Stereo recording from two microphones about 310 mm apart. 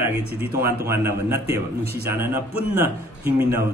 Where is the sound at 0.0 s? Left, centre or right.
Centre.